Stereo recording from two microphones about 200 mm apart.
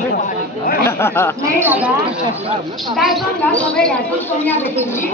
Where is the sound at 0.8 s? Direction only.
10° left (ahead or behind).